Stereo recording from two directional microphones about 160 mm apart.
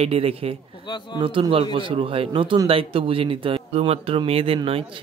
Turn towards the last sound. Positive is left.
turn(degrees=-35)  # may be behind; listen again after turning